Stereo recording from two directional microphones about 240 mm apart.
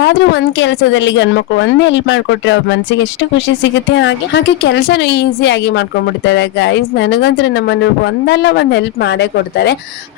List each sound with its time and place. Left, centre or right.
0.0 s speech: left